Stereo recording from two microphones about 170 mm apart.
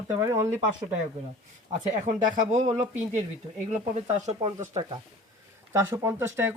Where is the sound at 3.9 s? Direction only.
40° right (ahead or behind).